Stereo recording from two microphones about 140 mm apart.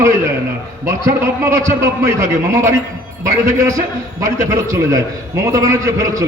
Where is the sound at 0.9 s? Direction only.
20° right (ahead or behind).